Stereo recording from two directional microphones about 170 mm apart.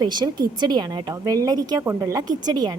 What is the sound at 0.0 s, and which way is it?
A woman's voice, 25° right (ahead or behind).